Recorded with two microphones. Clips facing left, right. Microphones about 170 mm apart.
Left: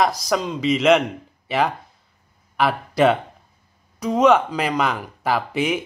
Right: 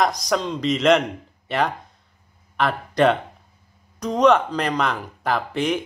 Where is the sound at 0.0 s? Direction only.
Centre (ahead or behind).